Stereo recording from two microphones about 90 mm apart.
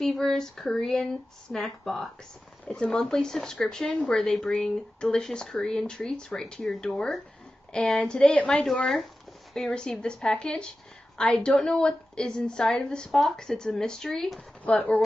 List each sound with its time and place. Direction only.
0.0 s a sound: centre (ahead or behind)
2.7 s speech: 5° left (ahead or behind)
14.6 s speech: 15° left (ahead or behind)